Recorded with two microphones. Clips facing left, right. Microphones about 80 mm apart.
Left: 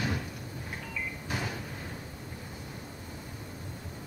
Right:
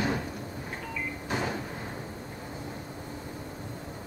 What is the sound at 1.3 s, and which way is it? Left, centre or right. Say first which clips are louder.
Cupboard open or close: right 5 dB; right.